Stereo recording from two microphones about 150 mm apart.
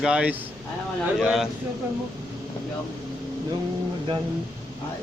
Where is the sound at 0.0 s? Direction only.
5° right (ahead or behind).